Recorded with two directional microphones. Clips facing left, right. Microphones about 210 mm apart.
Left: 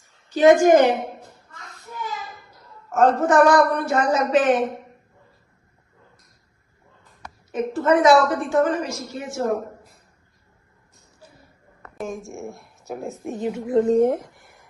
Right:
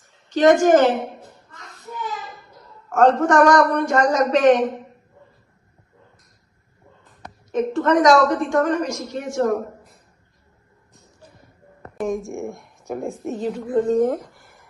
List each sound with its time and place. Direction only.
0.3 s a woman's voice: 10° left (ahead or behind)
1.5 s a sound: centre (ahead or behind)
2.9 s a woman's voice: 5° left (ahead or behind)
7.5 s a woman's voice: 5° left (ahead or behind)
11.9 s a woman's voice: centre (ahead or behind)
13.3 s a woman's voice: 20° left (ahead or behind)
13.8 s speech: 30° left (ahead or behind)
14.3 s a sound: centre (ahead or behind)